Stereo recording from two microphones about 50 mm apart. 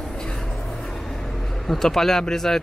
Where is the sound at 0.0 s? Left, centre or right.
Centre.